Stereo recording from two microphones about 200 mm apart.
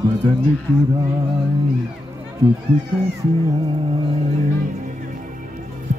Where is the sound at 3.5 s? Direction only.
20° right (ahead or behind).